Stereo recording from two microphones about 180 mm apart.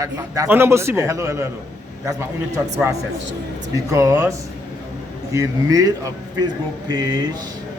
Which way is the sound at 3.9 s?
15° right (ahead or behind).